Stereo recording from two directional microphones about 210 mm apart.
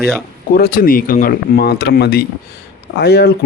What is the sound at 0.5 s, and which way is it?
Speech, 45° left (ahead or behind).